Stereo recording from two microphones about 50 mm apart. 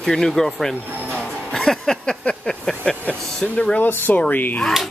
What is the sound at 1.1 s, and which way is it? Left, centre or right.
Music, centre.